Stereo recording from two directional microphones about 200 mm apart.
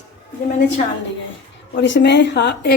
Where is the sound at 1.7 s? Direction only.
60° left (ahead or behind).